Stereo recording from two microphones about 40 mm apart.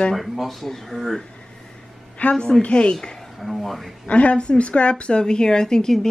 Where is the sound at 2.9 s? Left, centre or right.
Centre.